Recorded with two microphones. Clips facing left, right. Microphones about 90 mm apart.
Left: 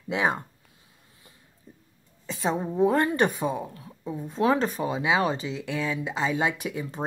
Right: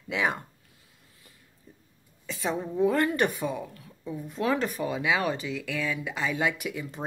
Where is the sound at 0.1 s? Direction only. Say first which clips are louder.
Left 3 dB; 25° left (ahead or behind).